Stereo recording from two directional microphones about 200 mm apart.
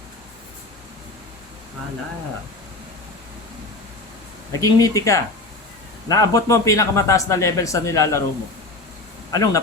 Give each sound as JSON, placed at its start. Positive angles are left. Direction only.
{"t": 4.6, "sound": "a man's voice", "side_deg": 15}
{"t": 9.3, "sound": "a man's voice", "side_deg": 15}